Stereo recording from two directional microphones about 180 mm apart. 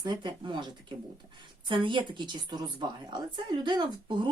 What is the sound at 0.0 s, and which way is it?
A woman's voice, 25° right (ahead or behind).